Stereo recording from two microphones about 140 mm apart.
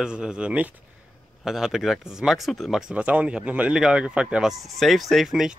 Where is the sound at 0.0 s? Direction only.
5° right (ahead or behind).